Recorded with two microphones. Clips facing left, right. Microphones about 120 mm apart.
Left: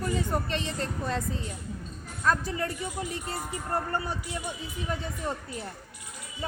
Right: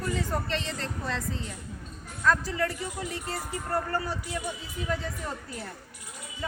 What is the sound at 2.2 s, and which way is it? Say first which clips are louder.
Speech: right 1 dB; 20° left (ahead or behind).